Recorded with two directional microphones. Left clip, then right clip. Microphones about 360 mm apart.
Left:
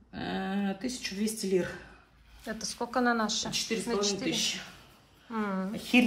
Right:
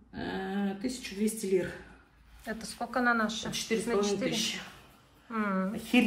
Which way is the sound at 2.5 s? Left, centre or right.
Centre.